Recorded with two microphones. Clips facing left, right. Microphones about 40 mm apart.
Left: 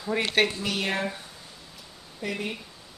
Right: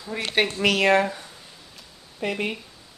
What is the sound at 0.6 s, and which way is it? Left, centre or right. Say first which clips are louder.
Speech: right 9 dB; right.